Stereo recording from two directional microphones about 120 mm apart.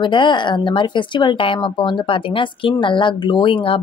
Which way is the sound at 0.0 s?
40° left (ahead or behind).